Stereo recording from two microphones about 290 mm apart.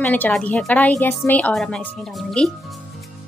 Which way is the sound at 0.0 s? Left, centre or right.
Centre.